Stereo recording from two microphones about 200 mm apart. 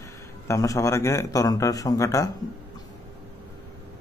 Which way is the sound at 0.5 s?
15° left (ahead or behind).